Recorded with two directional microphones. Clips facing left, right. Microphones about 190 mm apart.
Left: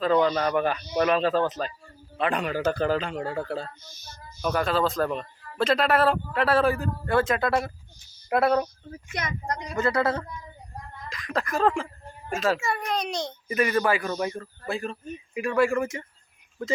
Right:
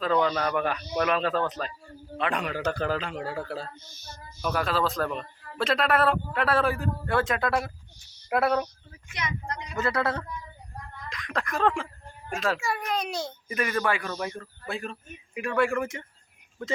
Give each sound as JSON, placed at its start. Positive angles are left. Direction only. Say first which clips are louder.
{"t": 0.0, "sound": "a man's voice", "louder": "left 3 dB", "side_deg": 5}
{"t": 8.9, "sound": "speech", "louder": "left 2 dB", "side_deg": 45}
{"t": 9.7, "sound": "a man's voice", "louder": "left 3 dB", "side_deg": 0}
{"t": 13.5, "sound": "a man's voice", "louder": "left 4 dB", "side_deg": 5}